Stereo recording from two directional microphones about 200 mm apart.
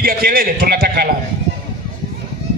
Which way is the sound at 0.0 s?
45° right (ahead or behind).